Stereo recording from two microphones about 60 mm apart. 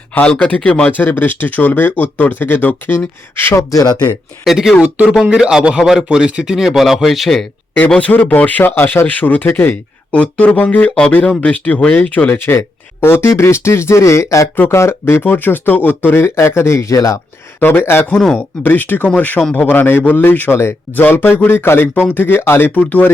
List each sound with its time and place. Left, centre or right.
0.1 s speech: left
3.7 s speech: left
4.4 s speech: centre
4.8 s a man's voice: centre
7.9 s speech: left
10.1 s speech: left
12.5 s speech: left
14.7 s speech: left
15.2 s speech: left
16.1 s speech: left
16.9 s speech: left
17.6 s speech: left
22.4 s speech: left
22.7 s speech: left